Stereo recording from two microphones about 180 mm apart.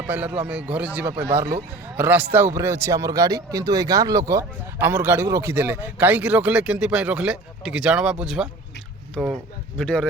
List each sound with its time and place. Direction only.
0.0 s speech: 10° right (ahead or behind)
1.1 s speech: 30° right (ahead or behind)
2.0 s speech: 10° right (ahead or behind)